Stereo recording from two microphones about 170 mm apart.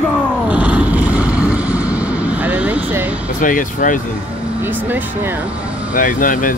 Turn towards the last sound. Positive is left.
turn(degrees=55)  # may be behind; listen again after turning